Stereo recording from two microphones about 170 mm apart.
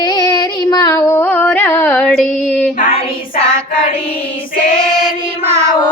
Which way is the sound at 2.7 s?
50° left (ahead or behind).